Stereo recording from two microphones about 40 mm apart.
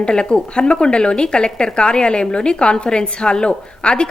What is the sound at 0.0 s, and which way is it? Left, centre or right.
Speech, left.